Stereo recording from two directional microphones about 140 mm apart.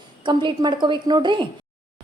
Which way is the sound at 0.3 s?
35° right (ahead or behind).